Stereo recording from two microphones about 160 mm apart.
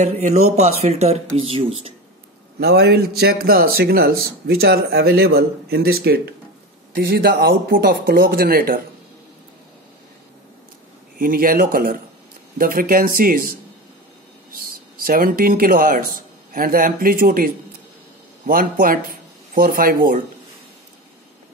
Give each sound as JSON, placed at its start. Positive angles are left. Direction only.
{"t": 0.0, "sound": "speech", "side_deg": -45}
{"t": 2.6, "sound": "speech", "side_deg": -90}
{"t": 11.1, "sound": "a man's voice", "side_deg": -65}
{"t": 15.0, "sound": "a man's voice", "side_deg": -65}